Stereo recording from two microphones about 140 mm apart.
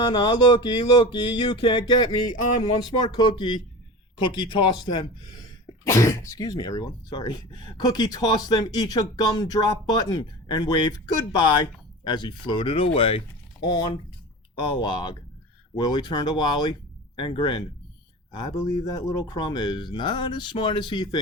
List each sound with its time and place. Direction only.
0.0 s speech: 30° left (ahead or behind)
5.9 s speech: 20° left (ahead or behind)